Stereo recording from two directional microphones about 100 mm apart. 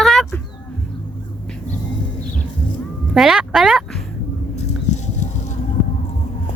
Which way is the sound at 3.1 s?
5° right (ahead or behind).